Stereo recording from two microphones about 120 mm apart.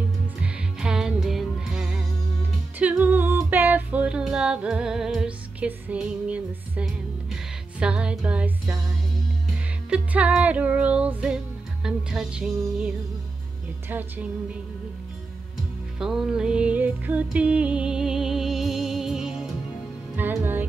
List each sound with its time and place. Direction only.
0.4 s music: 5° right (ahead or behind)
9.8 s music: 10° right (ahead or behind)
16.0 s music: 5° right (ahead or behind)
20.2 s music: 15° right (ahead or behind)